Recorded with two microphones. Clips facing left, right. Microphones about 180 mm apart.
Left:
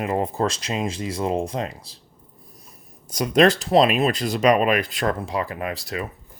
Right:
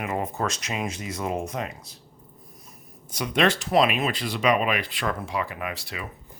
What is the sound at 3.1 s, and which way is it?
Speech, 40° left (ahead or behind).